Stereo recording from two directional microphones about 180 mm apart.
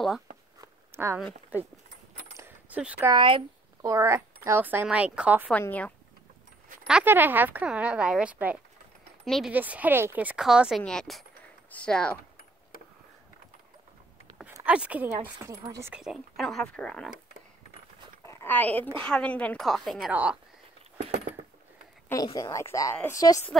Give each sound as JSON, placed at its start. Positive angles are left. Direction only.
{"t": 0.6, "sound": "a sound", "side_deg": -15}
{"t": 1.5, "sound": "speech", "side_deg": -10}
{"t": 2.3, "sound": "keys jangling", "side_deg": -10}
{"t": 3.1, "sound": "speech", "side_deg": -30}
{"t": 3.8, "sound": "a woman's voice", "side_deg": -15}
{"t": 5.5, "sound": "speech", "side_deg": 10}
{"t": 6.9, "sound": "a woman's voice", "side_deg": -10}
{"t": 9.5, "sound": "a woman's voice", "side_deg": -10}
{"t": 14.5, "sound": "speech", "side_deg": -10}
{"t": 15.6, "sound": "speech", "side_deg": -20}
{"t": 15.9, "sound": "a woman's voice", "side_deg": -5}
{"t": 18.2, "sound": "a sound", "side_deg": 15}
{"t": 18.9, "sound": "a woman's voice", "side_deg": 5}
{"t": 22.1, "sound": "speech", "side_deg": 20}